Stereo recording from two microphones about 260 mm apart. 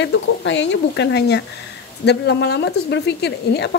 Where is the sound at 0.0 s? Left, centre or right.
Left.